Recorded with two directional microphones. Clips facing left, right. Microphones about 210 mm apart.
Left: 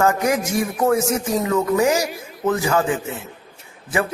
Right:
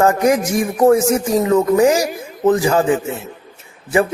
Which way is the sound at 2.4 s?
30° right (ahead or behind).